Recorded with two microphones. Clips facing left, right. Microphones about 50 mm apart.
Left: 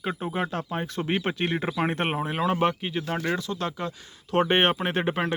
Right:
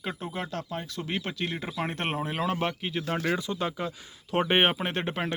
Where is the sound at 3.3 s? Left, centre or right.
Centre.